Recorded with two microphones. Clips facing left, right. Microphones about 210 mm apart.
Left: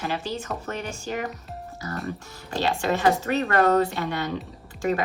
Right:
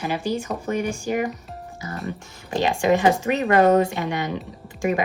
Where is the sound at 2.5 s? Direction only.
15° right (ahead or behind).